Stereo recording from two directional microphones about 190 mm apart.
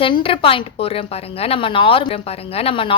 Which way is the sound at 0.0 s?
30° left (ahead or behind).